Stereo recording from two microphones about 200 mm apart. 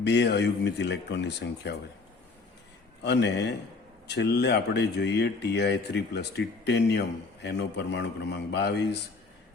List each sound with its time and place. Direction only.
0.0 s speech: 60° left (ahead or behind)
3.0 s speech: 60° left (ahead or behind)